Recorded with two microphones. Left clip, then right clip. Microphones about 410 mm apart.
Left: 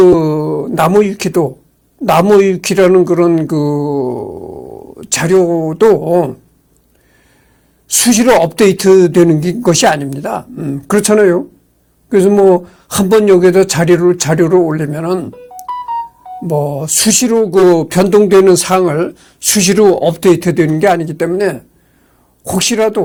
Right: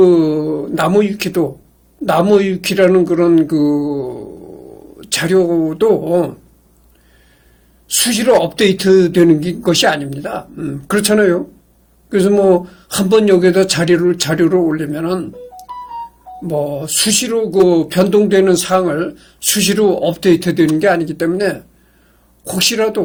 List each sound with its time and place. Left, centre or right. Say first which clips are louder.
0.0 s speech: left 2 dB; left
7.9 s speech: left 3 dB; left